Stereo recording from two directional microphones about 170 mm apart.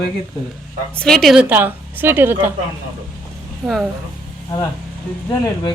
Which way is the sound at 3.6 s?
Centre (ahead or behind).